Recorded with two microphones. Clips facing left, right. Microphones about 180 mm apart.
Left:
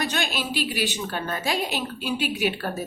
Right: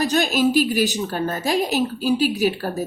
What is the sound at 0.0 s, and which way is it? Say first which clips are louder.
A woman's voice: right 9 dB; 40° right (ahead or behind).